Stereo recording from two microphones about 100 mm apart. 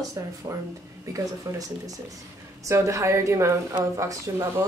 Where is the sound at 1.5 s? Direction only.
30° right (ahead or behind).